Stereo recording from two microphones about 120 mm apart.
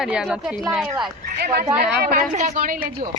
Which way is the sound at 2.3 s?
90° right.